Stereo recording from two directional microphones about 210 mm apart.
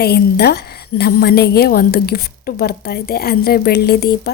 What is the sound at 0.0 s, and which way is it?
A woman's voice, 50° left (ahead or behind).